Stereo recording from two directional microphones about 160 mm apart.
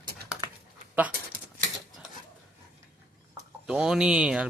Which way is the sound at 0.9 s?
10° right (ahead or behind).